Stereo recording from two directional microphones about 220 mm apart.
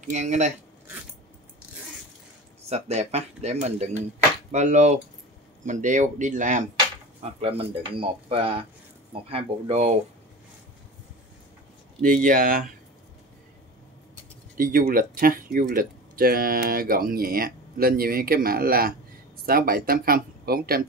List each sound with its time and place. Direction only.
0.0 s speech: 35° right (ahead or behind)
2.7 s speech: 30° right (ahead or behind)
12.0 s speech: 40° right (ahead or behind)
14.6 s speech: 40° right (ahead or behind)